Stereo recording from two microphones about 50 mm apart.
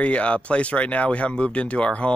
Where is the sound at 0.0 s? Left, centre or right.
Left.